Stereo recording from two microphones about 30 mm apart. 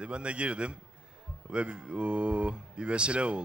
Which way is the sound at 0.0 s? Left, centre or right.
Right.